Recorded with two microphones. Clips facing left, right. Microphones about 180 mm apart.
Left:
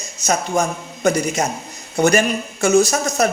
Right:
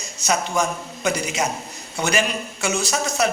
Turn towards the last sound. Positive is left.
turn(degrees=45)  # may be behind; listen again after turning